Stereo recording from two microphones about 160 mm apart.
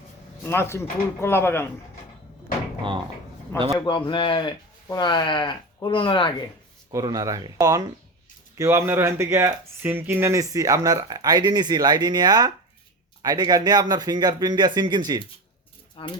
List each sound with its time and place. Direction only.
0.4 s speech: 15° left (ahead or behind)
3.5 s speech: 15° left (ahead or behind)
3.8 s speech: 30° left (ahead or behind)
6.9 s speech: 20° right (ahead or behind)
16.0 s speech: 30° left (ahead or behind)